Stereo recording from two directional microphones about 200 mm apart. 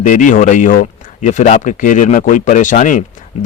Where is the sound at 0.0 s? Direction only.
40° left (ahead or behind).